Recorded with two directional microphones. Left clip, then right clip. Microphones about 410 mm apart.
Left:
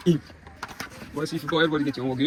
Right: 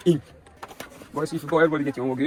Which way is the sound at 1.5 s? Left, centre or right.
Centre.